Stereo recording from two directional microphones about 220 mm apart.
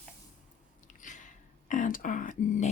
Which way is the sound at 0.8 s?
35° left (ahead or behind).